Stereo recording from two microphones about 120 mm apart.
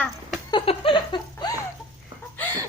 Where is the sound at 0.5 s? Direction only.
45° left (ahead or behind).